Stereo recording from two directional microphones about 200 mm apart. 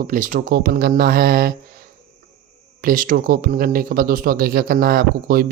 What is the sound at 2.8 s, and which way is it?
Speech, 45° right (ahead or behind).